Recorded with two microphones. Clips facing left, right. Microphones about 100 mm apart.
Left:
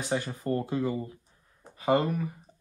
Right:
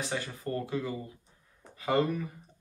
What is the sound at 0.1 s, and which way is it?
Speech, 25° left (ahead or behind).